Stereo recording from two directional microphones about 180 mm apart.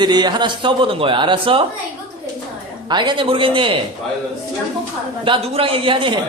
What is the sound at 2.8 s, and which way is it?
Speech, 25° right (ahead or behind).